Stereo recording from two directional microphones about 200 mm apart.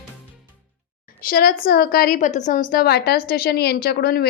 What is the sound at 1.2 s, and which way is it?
A woman's voice, 45° left (ahead or behind).